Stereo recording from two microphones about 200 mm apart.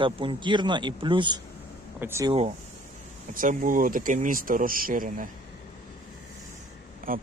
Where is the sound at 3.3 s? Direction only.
45° right (ahead or behind).